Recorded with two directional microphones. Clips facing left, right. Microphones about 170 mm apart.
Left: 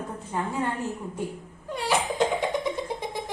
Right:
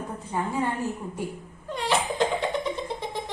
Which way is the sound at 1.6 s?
10° left (ahead or behind).